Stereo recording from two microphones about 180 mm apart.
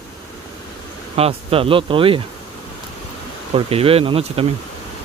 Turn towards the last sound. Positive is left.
turn(degrees=-30)  # may be behind; listen again after turning